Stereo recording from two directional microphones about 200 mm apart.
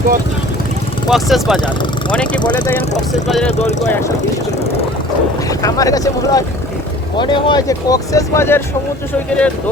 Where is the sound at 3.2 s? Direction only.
Centre (ahead or behind).